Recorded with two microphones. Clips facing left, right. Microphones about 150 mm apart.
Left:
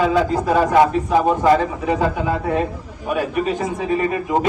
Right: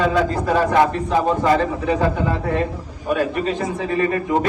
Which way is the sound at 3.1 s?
10° left (ahead or behind).